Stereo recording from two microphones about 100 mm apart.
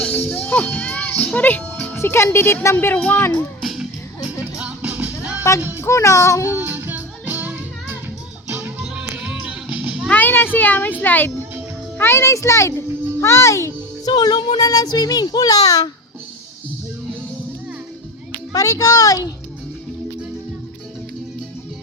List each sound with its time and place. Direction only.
0.0 s a child's voice: 15° left (ahead or behind)
3.6 s music: 5° right (ahead or behind); by 5.8 s 20° right (ahead or behind)
5.8 s child singing: 30° left (ahead or behind)
6.6 s music: 20° right (ahead or behind)
8.8 s music: 10° right (ahead or behind)
10.1 s speech: 20° left (ahead or behind)
13.1 s a sound: 30° left (ahead or behind)
14.1 s child singing: 40° left (ahead or behind)
18.5 s child singing: 35° left (ahead or behind)